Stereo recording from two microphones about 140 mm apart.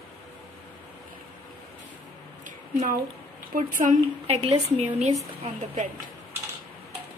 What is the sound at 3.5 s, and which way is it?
Speech, 70° right (ahead or behind).